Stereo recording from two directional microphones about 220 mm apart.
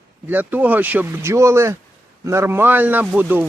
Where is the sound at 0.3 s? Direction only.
10° right (ahead or behind).